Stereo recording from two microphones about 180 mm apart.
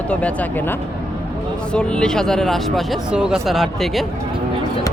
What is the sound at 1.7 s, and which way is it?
Speech, 5° left (ahead or behind).